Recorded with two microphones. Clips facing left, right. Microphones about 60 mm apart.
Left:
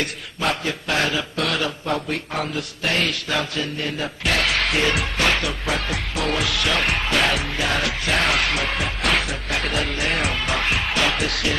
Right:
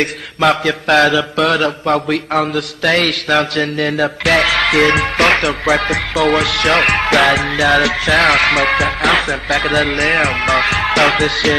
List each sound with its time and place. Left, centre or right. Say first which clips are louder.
0.0 s mantra: right 10 dB; right